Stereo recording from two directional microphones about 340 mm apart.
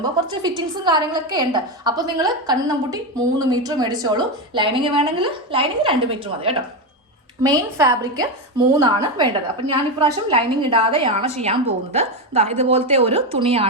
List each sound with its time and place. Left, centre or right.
0.0 s a woman's voice: centre